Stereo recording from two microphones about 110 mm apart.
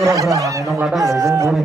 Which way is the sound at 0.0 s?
30° right (ahead or behind).